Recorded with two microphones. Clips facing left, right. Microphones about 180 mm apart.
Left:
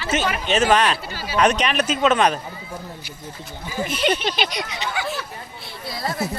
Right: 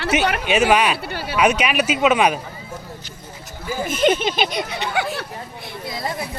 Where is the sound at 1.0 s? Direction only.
60° right (ahead or behind).